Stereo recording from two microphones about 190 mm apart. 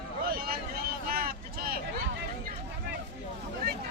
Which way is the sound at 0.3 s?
50° right (ahead or behind).